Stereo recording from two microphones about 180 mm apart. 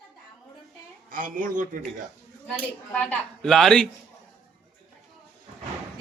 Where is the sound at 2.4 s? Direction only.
5° left (ahead or behind).